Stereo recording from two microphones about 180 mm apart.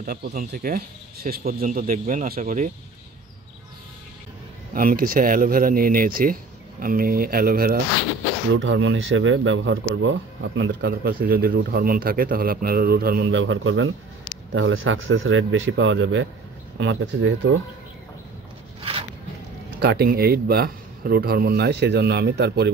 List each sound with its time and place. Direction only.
0.0 s speech: 55° right (ahead or behind)
4.7 s a man's voice: 50° right (ahead or behind)
8.5 s a man's voice: 90° right
19.8 s a man's voice: 60° right (ahead or behind)